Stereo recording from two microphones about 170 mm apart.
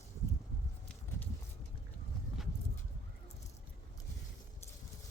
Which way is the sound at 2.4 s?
Centre (ahead or behind).